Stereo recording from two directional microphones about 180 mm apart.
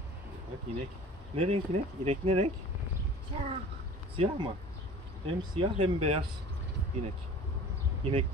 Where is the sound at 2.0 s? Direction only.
35° right (ahead or behind).